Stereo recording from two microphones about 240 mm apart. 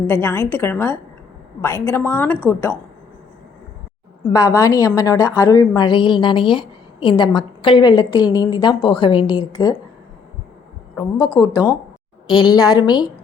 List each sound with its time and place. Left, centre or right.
0.1 s a woman's voice: centre
4.2 s a woman's voice: centre
10.9 s a woman's voice: centre